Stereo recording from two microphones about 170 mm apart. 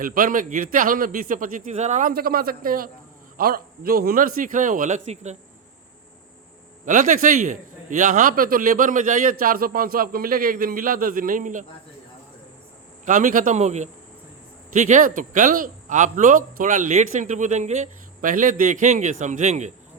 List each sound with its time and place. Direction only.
0.0 s a man's voice: 55° right (ahead or behind)
6.8 s a man's voice: 50° right (ahead or behind)
13.1 s a man's voice: 50° right (ahead or behind)